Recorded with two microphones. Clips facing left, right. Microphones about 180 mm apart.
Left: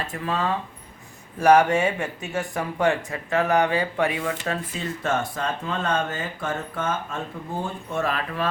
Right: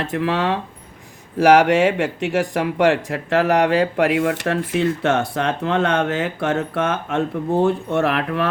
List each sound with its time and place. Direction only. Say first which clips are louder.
0.0 s speech: right 6 dB; 75° right (ahead or behind)
1.4 s speech: right 4 dB; 90° right; by 8.4 s 65° right (ahead or behind)